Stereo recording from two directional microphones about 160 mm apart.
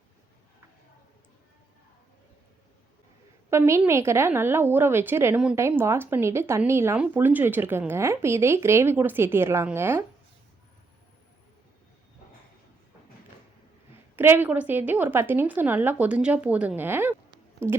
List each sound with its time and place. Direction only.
3.5 s speech: 15° right (ahead or behind)
14.2 s speech: 15° right (ahead or behind)
17.3 s a sound: 15° right (ahead or behind)